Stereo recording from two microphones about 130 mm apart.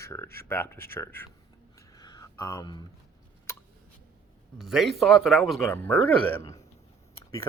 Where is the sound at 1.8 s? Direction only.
30° left (ahead or behind).